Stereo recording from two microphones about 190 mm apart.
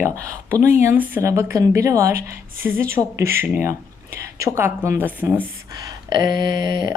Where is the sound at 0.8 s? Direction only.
10° right (ahead or behind).